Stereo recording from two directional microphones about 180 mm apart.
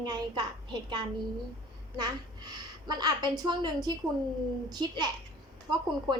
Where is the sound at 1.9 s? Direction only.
25° right (ahead or behind).